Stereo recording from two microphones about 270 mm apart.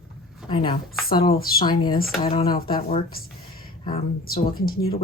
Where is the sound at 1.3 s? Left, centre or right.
Left.